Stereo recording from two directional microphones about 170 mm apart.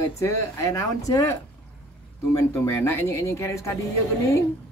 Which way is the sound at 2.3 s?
15° left (ahead or behind).